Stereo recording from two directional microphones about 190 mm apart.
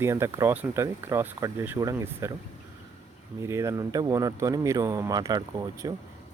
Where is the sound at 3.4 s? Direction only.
15° right (ahead or behind).